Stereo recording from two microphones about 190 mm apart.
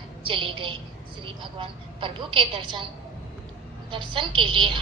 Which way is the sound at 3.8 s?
25° right (ahead or behind).